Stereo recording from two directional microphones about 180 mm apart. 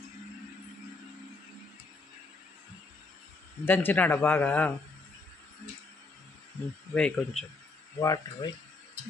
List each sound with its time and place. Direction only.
3.6 s a man's voice: 10° left (ahead or behind)
6.9 s speech: 5° left (ahead or behind)
8.0 s speech: 20° left (ahead or behind)